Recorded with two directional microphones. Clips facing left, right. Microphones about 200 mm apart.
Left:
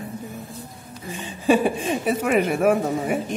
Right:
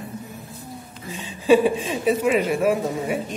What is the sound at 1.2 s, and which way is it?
A woman's voice, 50° left (ahead or behind).